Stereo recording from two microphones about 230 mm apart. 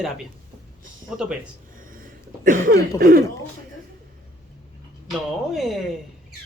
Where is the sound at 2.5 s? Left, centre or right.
Right.